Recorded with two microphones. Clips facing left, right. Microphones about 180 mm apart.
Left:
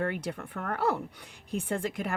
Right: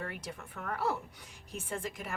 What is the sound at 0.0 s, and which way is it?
Speech, 65° left (ahead or behind).